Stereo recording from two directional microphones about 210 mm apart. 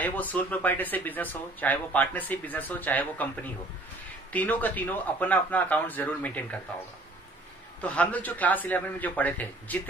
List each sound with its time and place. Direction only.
0.0 s speech: 10° left (ahead or behind)
7.8 s speech: 5° left (ahead or behind)